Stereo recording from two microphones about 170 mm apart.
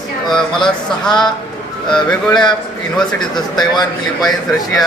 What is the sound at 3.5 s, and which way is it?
Speech, 25° left (ahead or behind).